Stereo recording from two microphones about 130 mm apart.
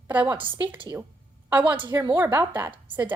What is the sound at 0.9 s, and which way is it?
Speech, 25° right (ahead or behind).